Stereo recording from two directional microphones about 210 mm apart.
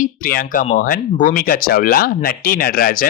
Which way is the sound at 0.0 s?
40° left (ahead or behind).